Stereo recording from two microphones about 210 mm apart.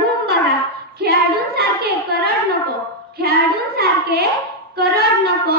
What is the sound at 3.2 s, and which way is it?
A woman's voice, 50° right (ahead or behind).